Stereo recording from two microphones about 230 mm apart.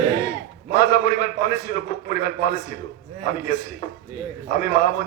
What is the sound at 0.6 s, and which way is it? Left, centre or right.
A man's voice, left.